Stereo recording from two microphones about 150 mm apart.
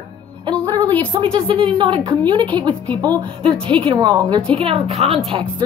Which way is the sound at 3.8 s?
30° right (ahead or behind).